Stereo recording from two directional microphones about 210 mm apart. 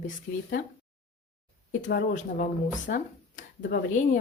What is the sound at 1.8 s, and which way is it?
A woman's voice, 40° left (ahead or behind).